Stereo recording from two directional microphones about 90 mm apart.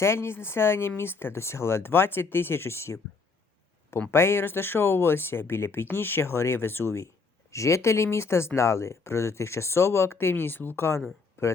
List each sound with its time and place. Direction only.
0.0 s speech: 30° left (ahead or behind)
4.1 s speech: 25° left (ahead or behind)